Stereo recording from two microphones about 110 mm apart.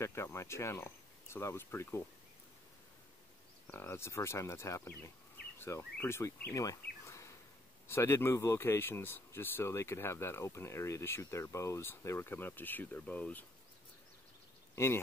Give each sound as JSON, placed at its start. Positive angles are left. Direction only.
{"t": 0.0, "sound": "speech", "side_deg": 25}
{"t": 3.7, "sound": "speech", "side_deg": 20}